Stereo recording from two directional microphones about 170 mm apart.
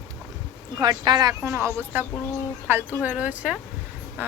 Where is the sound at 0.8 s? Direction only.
25° right (ahead or behind).